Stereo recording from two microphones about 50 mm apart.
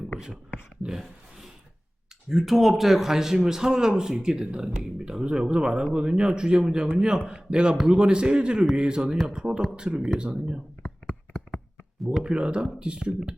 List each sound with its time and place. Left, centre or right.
0.9 s a sound: centre
2.3 s a man's voice: centre
5.2 s a man's voice: centre
11.9 s speech: centre
12.2 s speech: centre